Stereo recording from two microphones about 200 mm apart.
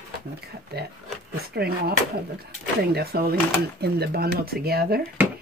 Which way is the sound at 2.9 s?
50° right (ahead or behind).